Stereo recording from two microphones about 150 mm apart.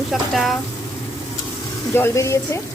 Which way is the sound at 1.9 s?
20° left (ahead or behind).